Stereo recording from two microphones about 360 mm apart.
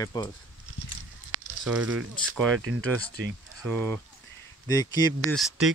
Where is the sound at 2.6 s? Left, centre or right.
Right.